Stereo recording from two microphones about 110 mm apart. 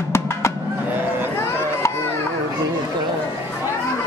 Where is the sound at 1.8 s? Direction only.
25° left (ahead or behind).